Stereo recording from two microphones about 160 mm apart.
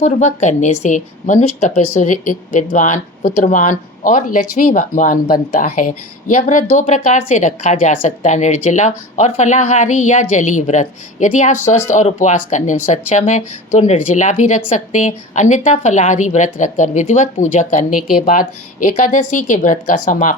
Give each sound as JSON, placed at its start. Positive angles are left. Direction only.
{"t": 0.0, "sound": "a woman's voice", "side_deg": 45}